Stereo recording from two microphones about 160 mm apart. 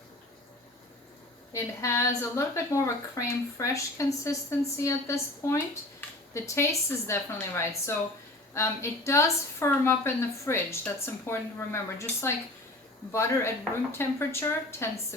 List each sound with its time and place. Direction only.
1.5 s a woman's voice: 15° left (ahead or behind)